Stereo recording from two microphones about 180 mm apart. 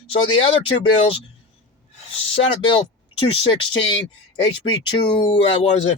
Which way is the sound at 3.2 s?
30° left (ahead or behind).